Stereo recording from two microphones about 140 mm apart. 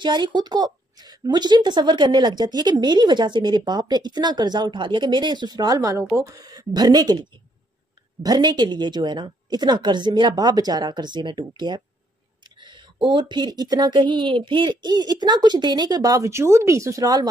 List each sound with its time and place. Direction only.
0.0 s speech: 35° right (ahead or behind)